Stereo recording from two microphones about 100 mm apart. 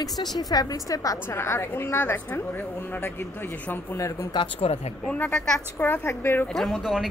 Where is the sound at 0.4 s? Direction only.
40° left (ahead or behind); by 4.0 s 20° left (ahead or behind).